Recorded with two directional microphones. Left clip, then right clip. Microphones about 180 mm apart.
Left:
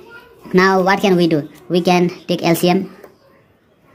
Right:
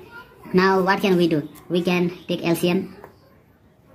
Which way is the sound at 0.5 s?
20° left (ahead or behind).